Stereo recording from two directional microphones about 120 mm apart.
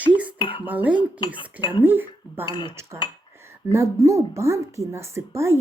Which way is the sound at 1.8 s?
15° right (ahead or behind).